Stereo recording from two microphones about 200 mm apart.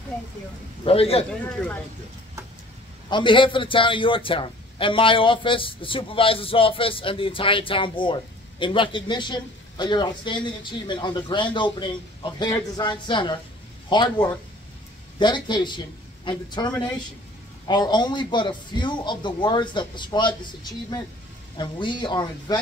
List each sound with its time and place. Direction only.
0.8 s a man's voice: 30° left (ahead or behind)
1.4 s speech: 10° left (ahead or behind)
3.1 s a man's voice: 25° left (ahead or behind)
21.5 s a man's voice: 25° left (ahead or behind)